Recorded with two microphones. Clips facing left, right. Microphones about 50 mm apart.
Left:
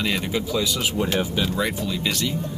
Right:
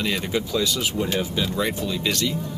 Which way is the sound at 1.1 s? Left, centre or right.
Left.